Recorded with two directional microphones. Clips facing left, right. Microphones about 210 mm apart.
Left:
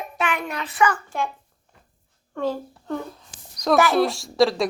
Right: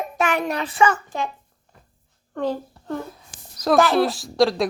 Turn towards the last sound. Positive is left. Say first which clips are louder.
# even
turn(degrees=0)  # may be behind; listen again after turning